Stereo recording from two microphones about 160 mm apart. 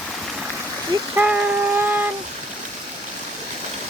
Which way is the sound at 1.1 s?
10° right (ahead or behind).